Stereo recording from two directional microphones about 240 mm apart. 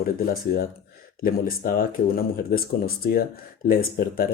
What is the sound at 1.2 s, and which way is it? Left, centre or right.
Speech, left.